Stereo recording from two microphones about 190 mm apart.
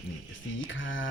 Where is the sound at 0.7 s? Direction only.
80° left.